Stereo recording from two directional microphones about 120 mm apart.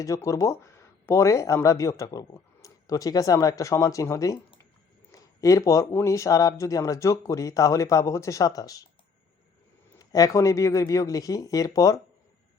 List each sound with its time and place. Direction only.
0.0 s speech: 25° left (ahead or behind)
10.0 s speech: 30° left (ahead or behind)